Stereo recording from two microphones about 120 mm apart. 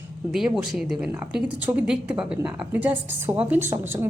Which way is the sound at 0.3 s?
5° right (ahead or behind).